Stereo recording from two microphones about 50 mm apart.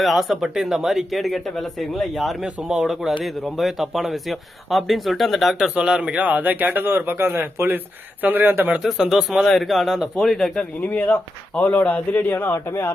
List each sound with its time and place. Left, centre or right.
0.0 s speech: centre
2.4 s speech: centre
5.7 s a man's voice: centre; by 8.7 s right
8.8 s speech: centre
9.5 s speech: centre
10.8 s speech: left
12.3 s speech: left
12.5 s speech: left